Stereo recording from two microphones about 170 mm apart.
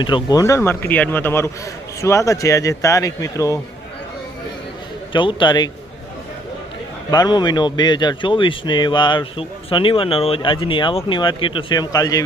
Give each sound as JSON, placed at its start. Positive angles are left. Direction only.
{"t": 0.0, "sound": "speech", "side_deg": 25}
{"t": 5.1, "sound": "speech", "side_deg": 30}
{"t": 7.1, "sound": "speech", "side_deg": 25}